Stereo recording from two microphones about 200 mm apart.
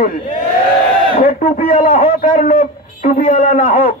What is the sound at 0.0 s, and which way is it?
A man's voice, 40° left (ahead or behind).